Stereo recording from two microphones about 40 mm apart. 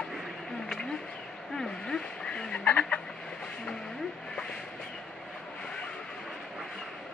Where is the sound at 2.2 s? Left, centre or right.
Left.